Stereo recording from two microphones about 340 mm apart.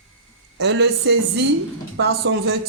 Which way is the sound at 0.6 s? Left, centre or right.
Right.